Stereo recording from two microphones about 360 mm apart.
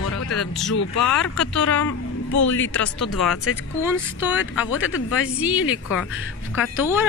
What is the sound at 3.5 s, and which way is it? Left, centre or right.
Speech, left.